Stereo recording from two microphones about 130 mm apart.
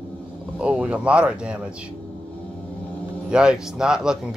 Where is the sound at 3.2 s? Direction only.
5° right (ahead or behind).